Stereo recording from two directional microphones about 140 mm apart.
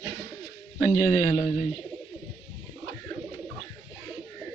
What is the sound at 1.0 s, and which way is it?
Speech, 20° left (ahead or behind).